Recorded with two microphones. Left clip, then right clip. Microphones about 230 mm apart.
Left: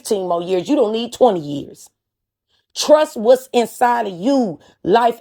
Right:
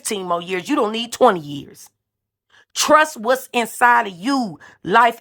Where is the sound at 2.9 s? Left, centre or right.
Centre.